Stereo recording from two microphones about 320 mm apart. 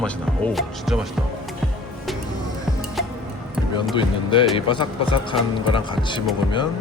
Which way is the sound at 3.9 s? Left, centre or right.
Centre.